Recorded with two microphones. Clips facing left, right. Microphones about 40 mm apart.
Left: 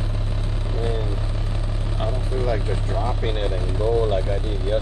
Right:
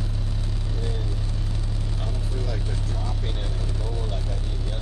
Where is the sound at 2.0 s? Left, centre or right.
Left.